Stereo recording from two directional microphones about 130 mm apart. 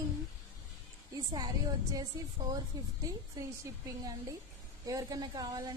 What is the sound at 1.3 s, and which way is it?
A woman's voice, 30° right (ahead or behind).